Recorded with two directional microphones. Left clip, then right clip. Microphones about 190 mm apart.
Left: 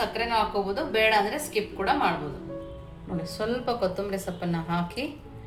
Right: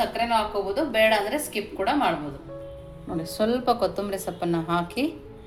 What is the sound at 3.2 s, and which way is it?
A woman's voice, 35° right (ahead or behind).